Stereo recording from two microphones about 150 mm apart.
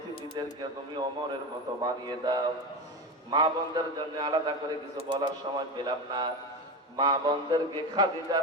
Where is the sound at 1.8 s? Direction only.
30° right (ahead or behind).